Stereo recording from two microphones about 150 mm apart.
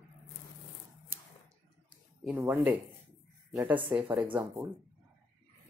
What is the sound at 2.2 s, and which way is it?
Speech, centre (ahead or behind).